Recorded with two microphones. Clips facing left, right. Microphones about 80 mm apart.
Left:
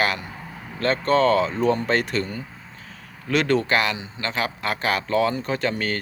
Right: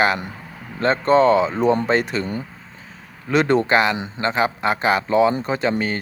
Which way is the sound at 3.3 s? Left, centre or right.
Right.